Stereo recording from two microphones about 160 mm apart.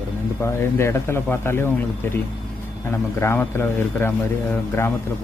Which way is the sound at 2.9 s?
15° left (ahead or behind).